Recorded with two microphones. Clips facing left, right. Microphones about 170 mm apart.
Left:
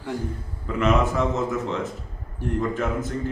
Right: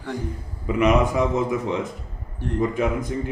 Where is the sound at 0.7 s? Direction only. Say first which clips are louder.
Right 3 dB; 15° right (ahead or behind).